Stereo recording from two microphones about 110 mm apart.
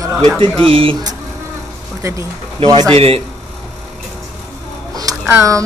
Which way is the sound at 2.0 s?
25° right (ahead or behind).